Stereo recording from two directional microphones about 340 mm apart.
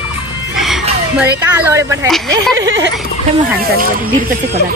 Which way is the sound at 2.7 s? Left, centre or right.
Right.